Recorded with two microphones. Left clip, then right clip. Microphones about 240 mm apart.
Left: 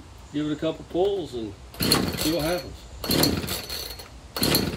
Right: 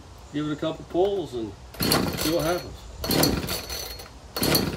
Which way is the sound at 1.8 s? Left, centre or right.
Centre.